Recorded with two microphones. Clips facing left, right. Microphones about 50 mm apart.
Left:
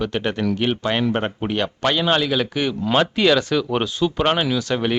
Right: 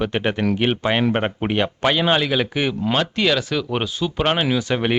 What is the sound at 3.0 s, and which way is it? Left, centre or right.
Speech, centre.